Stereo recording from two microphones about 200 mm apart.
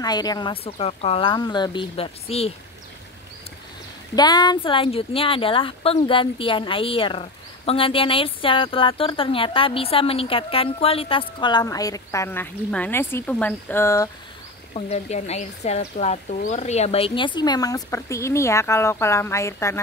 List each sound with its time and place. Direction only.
0.0 s speech: 20° left (ahead or behind)
4.1 s speech: 20° left (ahead or behind)
14.7 s speech: 35° left (ahead or behind); by 19.8 s 15° left (ahead or behind)